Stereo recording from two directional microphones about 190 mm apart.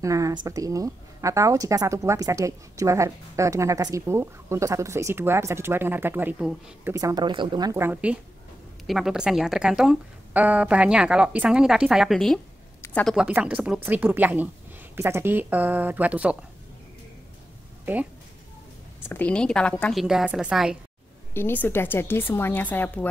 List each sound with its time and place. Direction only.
0.0 s a woman's voice: 15° right (ahead or behind); by 12.4 s centre (ahead or behind)
12.8 s a sound: 10° left (ahead or behind)
13.1 s speech: 5° right (ahead or behind)
18.9 s a woman's voice: 10° left (ahead or behind)
21.3 s a woman's voice: 10° left (ahead or behind)